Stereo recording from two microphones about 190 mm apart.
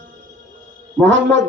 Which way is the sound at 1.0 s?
75° right (ahead or behind).